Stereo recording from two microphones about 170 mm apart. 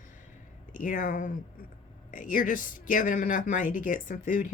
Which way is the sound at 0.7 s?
50° left (ahead or behind).